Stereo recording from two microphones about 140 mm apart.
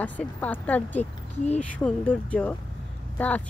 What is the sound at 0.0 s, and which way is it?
Speech, 10° left (ahead or behind).